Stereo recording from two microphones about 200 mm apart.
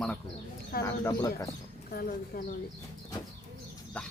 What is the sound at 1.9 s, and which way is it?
Speech, 45° left (ahead or behind).